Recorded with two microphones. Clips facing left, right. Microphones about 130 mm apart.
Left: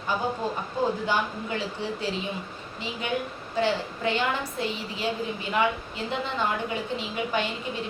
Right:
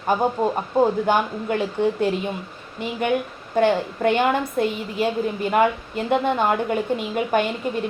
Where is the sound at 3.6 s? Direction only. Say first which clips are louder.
Right 7 dB; 55° right (ahead or behind).